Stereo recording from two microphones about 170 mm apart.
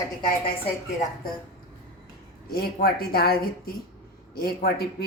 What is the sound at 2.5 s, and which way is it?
Speech, 65° left (ahead or behind).